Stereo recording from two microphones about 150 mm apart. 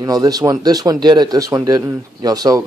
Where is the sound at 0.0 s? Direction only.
25° right (ahead or behind).